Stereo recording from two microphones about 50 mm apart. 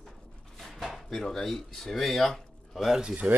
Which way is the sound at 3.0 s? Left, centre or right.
Right.